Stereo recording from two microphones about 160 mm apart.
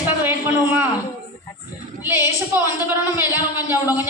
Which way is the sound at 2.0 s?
15° right (ahead or behind).